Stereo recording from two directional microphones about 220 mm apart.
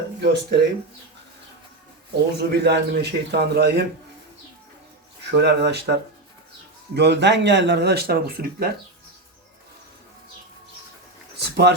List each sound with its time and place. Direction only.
0.2 s speech: 50° right (ahead or behind)
2.4 s speech: 50° right (ahead or behind)
5.4 s speech: 50° right (ahead or behind)
11.3 s a sound: 50° right (ahead or behind)